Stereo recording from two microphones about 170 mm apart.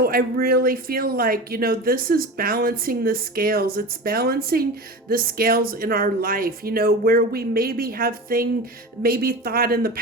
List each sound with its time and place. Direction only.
0.0 s speech: 60° right (ahead or behind)